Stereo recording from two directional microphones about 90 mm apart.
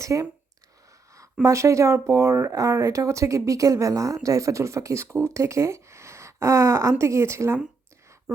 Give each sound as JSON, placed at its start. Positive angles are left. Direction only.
{"t": 0.0, "sound": "speech", "side_deg": -35}